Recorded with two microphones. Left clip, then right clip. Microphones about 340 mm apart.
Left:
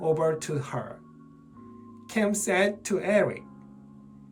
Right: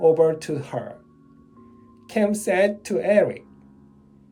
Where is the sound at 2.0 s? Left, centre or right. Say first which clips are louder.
Right 5 dB; centre.